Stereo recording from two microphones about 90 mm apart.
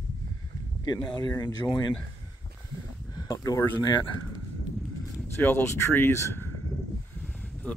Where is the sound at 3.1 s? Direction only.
45° left (ahead or behind).